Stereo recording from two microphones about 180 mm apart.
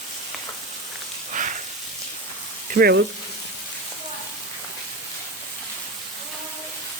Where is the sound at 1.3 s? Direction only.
45° right (ahead or behind).